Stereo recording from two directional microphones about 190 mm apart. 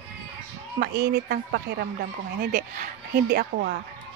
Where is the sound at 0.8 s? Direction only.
55° right (ahead or behind).